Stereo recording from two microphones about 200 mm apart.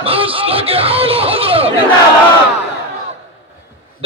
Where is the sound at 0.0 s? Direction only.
30° right (ahead or behind).